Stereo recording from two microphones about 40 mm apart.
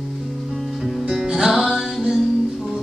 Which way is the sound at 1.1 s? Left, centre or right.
Centre.